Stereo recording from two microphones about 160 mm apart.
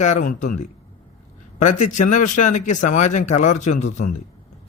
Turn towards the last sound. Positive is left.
turn(degrees=50)  # may be behind; listen again after turning